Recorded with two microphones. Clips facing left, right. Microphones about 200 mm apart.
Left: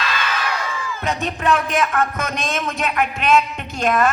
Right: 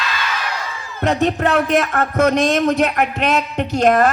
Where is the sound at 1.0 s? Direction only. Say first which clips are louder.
Right 5 dB; 65° right (ahead or behind).